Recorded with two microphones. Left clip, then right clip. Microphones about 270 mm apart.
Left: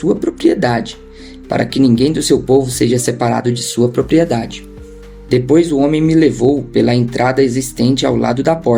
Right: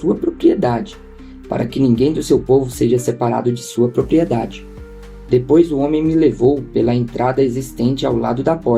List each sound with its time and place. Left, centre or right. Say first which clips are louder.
0.0 s speech: left 1 dB; left